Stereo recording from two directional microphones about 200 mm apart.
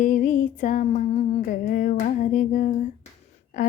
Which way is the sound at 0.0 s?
40° left (ahead or behind).